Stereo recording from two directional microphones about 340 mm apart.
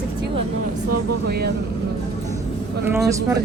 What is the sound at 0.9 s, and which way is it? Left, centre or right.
Speech, right.